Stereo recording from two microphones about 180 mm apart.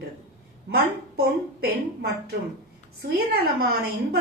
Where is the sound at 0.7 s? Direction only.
60° right (ahead or behind).